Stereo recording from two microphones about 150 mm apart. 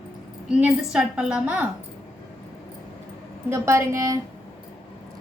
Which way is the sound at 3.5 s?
20° right (ahead or behind).